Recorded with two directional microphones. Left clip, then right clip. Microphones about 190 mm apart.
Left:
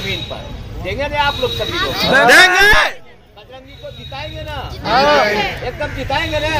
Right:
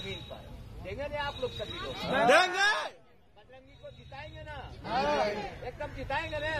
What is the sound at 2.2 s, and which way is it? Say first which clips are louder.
Speech: left 15 dB; 5° right (ahead or behind).